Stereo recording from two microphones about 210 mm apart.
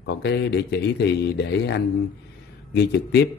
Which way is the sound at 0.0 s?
55° left (ahead or behind).